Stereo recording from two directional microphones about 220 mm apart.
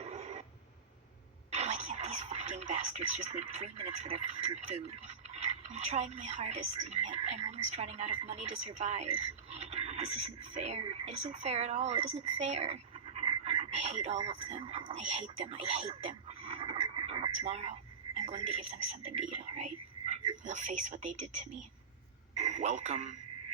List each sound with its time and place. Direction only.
0.0 s a sound: 30° right (ahead or behind)
1.5 s speech: 30° right (ahead or behind)
16.5 s radio: 25° right (ahead or behind)
22.4 s a man's voice: 30° right (ahead or behind)